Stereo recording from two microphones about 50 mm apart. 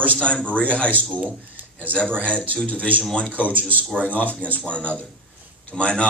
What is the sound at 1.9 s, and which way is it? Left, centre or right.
Speech, left.